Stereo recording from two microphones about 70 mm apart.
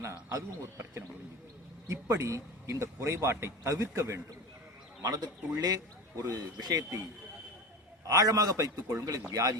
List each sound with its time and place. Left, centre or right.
0.3 s a man's voice: right
5.0 s a man's voice: right